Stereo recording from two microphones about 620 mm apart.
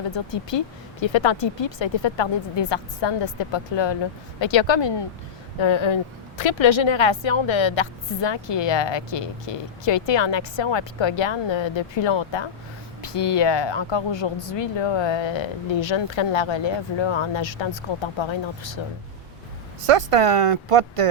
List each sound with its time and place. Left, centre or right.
0.5 s a woman's voice: left
19.8 s speech: right